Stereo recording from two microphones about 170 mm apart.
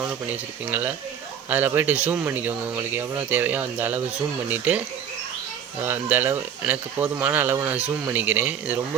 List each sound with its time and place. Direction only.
0.0 s speech: 10° right (ahead or behind)
5.8 s speech: 10° right (ahead or behind)